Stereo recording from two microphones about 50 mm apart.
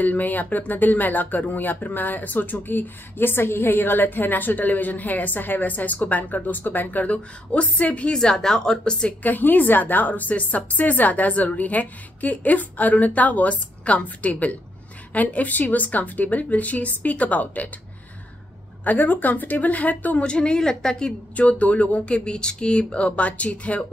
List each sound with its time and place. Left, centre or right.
0.0 s speech: left
8.2 s a woman's voice: centre
9.2 s speech: left
18.9 s speech: left
20.2 s a woman's voice: centre
21.4 s speech: left